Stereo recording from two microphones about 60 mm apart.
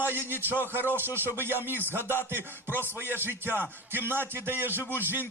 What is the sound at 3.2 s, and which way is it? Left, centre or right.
A man's voice, right.